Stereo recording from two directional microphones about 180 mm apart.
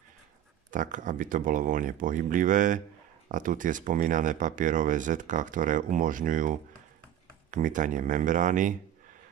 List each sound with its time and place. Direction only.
0.7 s speech: 45° right (ahead or behind)
7.5 s speech: 45° right (ahead or behind)